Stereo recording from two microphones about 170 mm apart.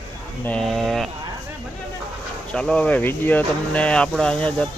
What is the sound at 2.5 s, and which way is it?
Speech, 5° left (ahead or behind).